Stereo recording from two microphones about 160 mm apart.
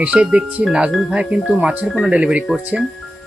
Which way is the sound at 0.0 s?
5° right (ahead or behind).